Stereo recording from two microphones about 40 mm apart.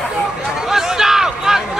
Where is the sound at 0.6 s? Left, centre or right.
Centre.